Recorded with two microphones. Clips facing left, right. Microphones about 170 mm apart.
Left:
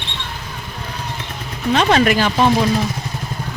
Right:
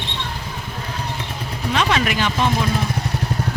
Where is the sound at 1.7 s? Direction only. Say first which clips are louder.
Left 6 dB; 35° left (ahead or behind).